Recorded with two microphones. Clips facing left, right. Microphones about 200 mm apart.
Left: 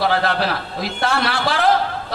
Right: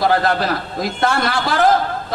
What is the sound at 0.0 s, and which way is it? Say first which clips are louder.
A man's voice: right 2 dB; 45° right (ahead or behind).